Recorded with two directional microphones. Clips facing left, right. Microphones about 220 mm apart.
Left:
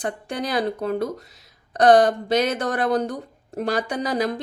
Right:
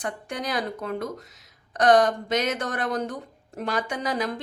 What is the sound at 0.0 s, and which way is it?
Speech, 30° left (ahead or behind).